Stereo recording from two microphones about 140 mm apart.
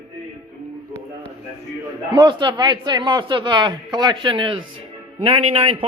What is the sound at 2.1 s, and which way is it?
A man's voice, 30° right (ahead or behind).